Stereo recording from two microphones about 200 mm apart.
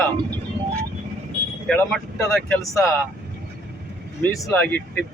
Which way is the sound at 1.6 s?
5° left (ahead or behind).